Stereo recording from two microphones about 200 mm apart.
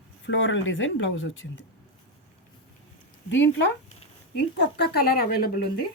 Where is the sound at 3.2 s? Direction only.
65° left (ahead or behind); by 5.5 s 50° left (ahead or behind).